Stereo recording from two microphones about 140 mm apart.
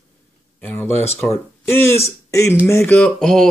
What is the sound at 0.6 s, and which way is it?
Speech, 15° left (ahead or behind).